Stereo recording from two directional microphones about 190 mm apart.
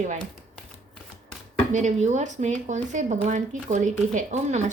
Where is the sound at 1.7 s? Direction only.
40° right (ahead or behind).